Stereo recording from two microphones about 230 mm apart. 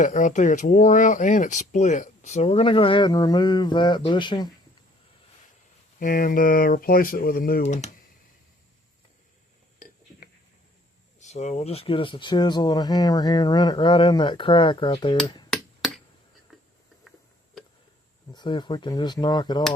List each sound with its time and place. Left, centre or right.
0.0 s speech: left
6.0 s speech: left
9.7 s a sound: left
11.2 s speech: left
18.3 s speech: centre